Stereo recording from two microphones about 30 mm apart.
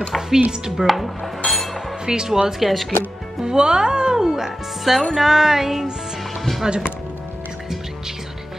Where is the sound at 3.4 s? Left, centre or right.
Right.